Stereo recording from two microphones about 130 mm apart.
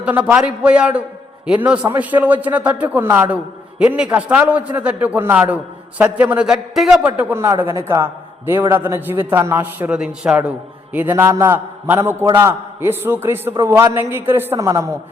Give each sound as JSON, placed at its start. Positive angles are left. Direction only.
{"t": 0.0, "sound": "a man's voice", "side_deg": -10}